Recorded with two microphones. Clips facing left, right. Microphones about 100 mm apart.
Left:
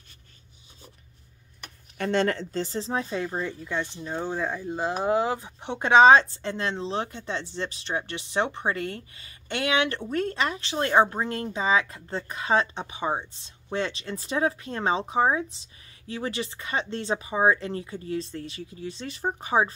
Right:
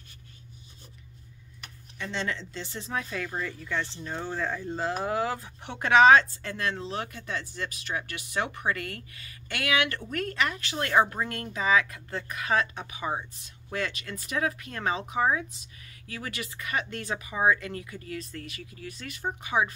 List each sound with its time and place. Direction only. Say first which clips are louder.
2.0 s speech: left 8 dB; 55° left (ahead or behind); by 19.7 s 35° left (ahead or behind)